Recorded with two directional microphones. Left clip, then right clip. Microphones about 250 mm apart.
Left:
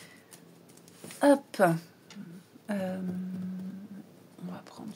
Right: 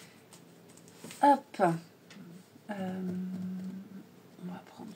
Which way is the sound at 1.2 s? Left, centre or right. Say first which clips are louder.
Left 1 dB; left.